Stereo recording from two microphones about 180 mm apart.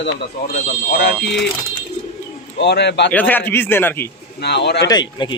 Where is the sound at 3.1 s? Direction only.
10° left (ahead or behind).